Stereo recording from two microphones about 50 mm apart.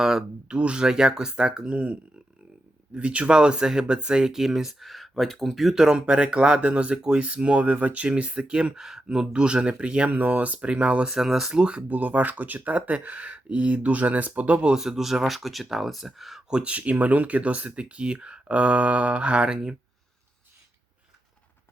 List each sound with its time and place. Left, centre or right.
0.0 s speech: centre
0.5 s speech: right; by 5.8 s centre
5.8 s speech: centre
11.1 s speech: centre
11.5 s speech: centre
11.8 s speech: right
14.8 s speech: centre
16.5 s speech: right